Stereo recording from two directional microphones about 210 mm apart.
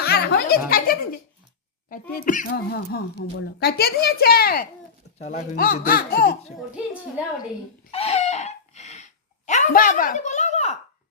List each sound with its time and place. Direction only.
0.0 s speech: 50° left (ahead or behind)
2.5 s speech: 60° left (ahead or behind)
7.9 s a sound: 30° left (ahead or behind)
9.5 s speech: 40° left (ahead or behind)